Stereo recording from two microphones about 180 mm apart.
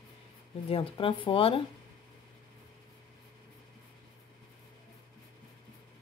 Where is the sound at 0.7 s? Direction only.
30° left (ahead or behind).